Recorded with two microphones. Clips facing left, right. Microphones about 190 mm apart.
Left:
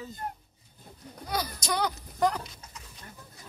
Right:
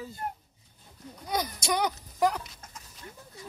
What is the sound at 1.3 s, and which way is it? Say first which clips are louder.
Speech: right 2 dB; 20° right (ahead or behind).